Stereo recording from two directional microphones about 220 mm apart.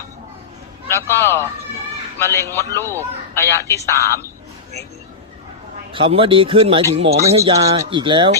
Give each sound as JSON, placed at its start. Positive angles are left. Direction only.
{"t": 0.9, "sound": "a man's voice", "side_deg": 10}
{"t": 5.9, "sound": "speech", "side_deg": -25}